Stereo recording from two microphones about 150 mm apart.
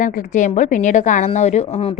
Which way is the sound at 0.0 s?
60° left (ahead or behind).